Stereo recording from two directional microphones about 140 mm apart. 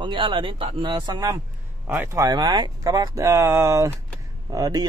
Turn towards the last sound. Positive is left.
turn(degrees=-25)  # may be behind; listen again after turning